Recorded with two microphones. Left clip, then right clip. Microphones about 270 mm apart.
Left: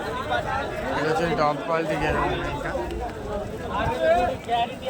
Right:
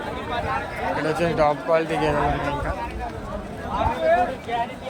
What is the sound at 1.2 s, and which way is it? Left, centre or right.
Speech, centre.